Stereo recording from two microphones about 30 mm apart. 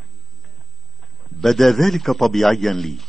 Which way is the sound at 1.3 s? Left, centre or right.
Centre.